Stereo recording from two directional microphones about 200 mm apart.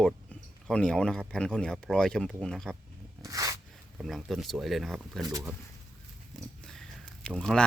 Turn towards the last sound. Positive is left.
turn(degrees=5)  # may be behind; listen again after turning